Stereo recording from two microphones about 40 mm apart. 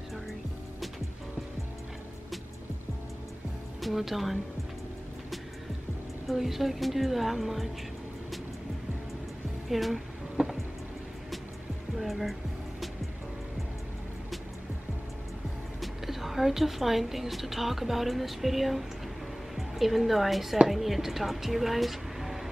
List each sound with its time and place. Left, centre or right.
3.8 s a woman's voice: centre
6.2 s a woman's voice: centre
9.7 s a woman's voice: centre
10.4 s music: right
12.0 s a woman's voice: centre
15.8 s a woman's voice: centre